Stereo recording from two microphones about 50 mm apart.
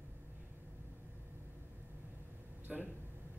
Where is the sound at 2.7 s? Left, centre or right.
Centre.